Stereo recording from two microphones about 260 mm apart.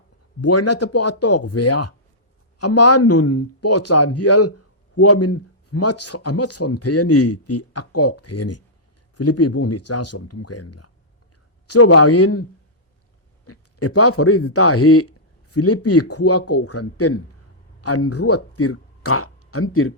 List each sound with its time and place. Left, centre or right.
0.4 s a man's voice: left